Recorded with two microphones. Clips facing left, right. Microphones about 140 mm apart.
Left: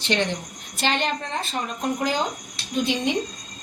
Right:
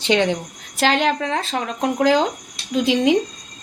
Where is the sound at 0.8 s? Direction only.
90° right.